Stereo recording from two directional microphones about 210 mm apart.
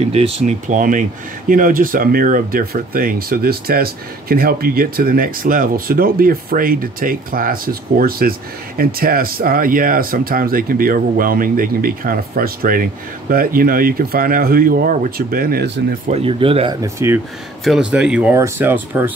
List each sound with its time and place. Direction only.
0.0 s speech: 30° right (ahead or behind); by 15.7 s 45° right (ahead or behind)
16.1 s speech: 25° right (ahead or behind)
16.8 s speech: 15° right (ahead or behind)